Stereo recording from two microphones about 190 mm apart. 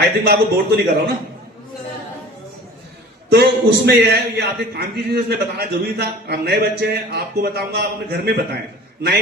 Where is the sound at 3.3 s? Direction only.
60° right (ahead or behind).